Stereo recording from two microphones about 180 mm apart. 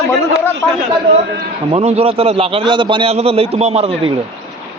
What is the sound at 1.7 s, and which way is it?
A man's voice, 35° right (ahead or behind).